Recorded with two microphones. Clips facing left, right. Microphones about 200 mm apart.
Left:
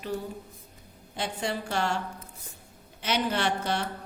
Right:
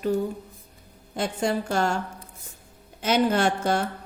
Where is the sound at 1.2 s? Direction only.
45° right (ahead or behind).